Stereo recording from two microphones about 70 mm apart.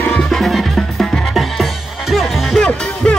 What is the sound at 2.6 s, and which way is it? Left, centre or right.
Music, centre.